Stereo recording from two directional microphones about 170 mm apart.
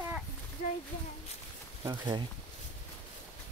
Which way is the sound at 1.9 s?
25° right (ahead or behind).